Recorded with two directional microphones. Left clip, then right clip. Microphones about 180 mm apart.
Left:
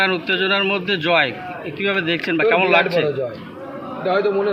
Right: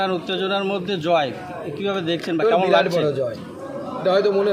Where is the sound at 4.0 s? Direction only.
30° right (ahead or behind).